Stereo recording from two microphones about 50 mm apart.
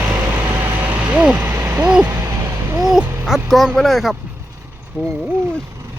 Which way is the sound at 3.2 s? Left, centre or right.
Centre.